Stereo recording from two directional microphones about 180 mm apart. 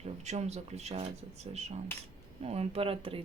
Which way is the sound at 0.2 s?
40° right (ahead or behind).